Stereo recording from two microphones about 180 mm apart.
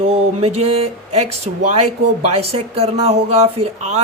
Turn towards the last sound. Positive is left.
turn(degrees=-35)  # may be behind; listen again after turning